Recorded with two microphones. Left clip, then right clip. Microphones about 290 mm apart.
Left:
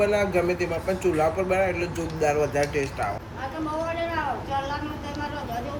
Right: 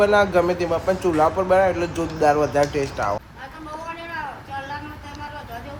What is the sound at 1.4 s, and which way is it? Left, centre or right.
A man's voice, centre.